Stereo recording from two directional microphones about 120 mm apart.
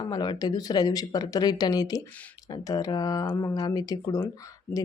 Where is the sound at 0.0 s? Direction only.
35° left (ahead or behind).